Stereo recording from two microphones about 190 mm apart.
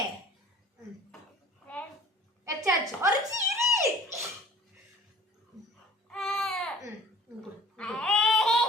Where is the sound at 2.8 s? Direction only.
20° right (ahead or behind).